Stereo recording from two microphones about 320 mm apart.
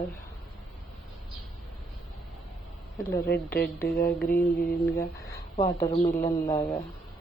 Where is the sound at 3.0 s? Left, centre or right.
Left.